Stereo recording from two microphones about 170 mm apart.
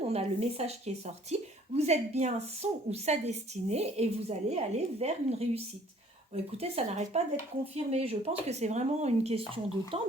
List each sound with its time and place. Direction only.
0.1 s a woman's voice: 35° right (ahead or behind)